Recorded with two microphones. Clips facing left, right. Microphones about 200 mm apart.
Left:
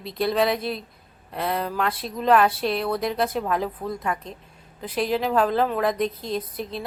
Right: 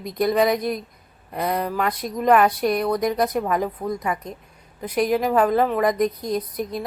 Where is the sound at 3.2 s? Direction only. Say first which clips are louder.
Right 3 dB; 15° right (ahead or behind).